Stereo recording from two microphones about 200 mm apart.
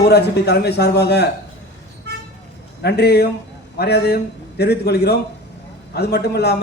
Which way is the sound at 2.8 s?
55° left (ahead or behind).